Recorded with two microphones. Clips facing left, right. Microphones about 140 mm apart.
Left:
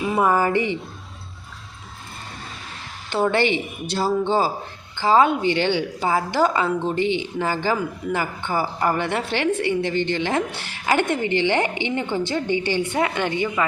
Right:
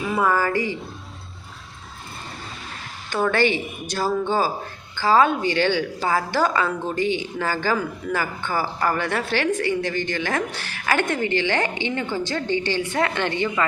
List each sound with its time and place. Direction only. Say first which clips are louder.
0.1 s a woman's voice: left 2 dB; 20° left (ahead or behind)
3.1 s a woman's voice: left 1 dB; 20° left (ahead or behind)